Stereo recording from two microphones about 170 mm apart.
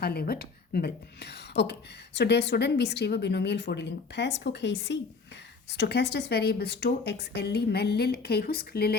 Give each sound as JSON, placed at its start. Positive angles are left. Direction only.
{"t": 0.0, "sound": "a woman's voice", "side_deg": 65}